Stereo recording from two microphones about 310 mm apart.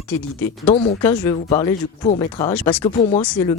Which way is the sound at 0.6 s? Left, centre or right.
Centre.